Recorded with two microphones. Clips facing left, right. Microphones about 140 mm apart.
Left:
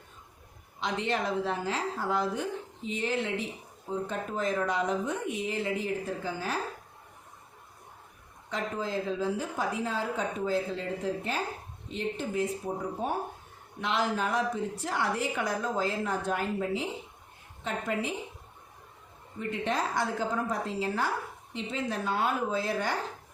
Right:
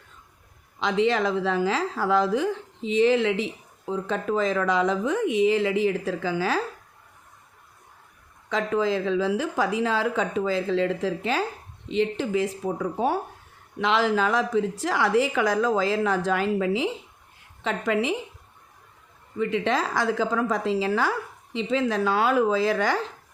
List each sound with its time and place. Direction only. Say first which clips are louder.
0.8 s a woman's voice: right 8 dB; 90° right
8.4 s a woman's voice: right 9 dB; 90° right
19.4 s a woman's voice: right 7 dB; 90° right